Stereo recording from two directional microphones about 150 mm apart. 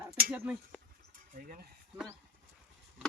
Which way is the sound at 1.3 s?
65° right (ahead or behind).